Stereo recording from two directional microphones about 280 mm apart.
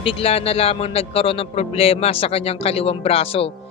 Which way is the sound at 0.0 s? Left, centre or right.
Centre.